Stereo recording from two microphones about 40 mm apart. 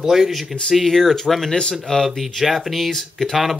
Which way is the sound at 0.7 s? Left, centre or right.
Centre.